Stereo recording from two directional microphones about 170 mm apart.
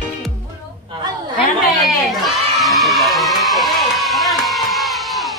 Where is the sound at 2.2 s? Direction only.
Centre (ahead or behind).